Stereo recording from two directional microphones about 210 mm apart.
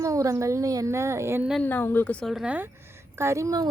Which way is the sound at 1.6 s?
10° left (ahead or behind).